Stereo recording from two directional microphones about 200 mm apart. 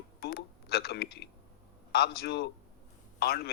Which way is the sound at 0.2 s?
50° left (ahead or behind).